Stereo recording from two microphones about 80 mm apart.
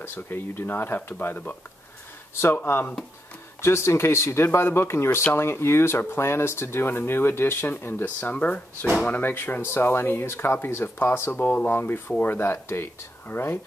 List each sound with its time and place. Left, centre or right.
0.0 s speech: left
11.4 s speech: left